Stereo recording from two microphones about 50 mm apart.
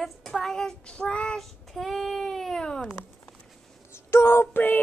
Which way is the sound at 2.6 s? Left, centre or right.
Centre.